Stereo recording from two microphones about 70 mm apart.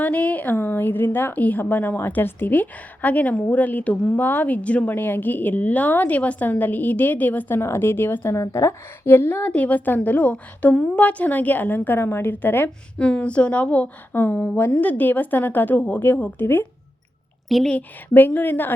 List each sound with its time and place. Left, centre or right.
0.0 s a woman's voice: left
11.0 s a woman's voice: left
13.0 s a woman's voice: centre
17.7 s a woman's voice: left